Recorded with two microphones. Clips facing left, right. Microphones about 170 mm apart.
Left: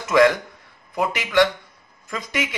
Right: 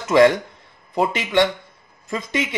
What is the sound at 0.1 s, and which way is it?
Speech, 25° right (ahead or behind).